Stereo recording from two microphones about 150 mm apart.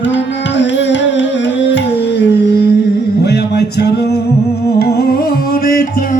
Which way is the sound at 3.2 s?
90° left.